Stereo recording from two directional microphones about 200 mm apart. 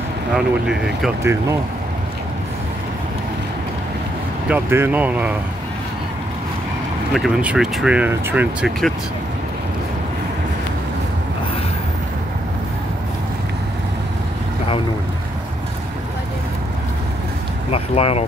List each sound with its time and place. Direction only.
0.4 s speech: centre (ahead or behind)
1.2 s speech: 15° right (ahead or behind)
4.5 s speech: 10° right (ahead or behind)
7.2 s speech: centre (ahead or behind)
17.7 s speech: 30° left (ahead or behind)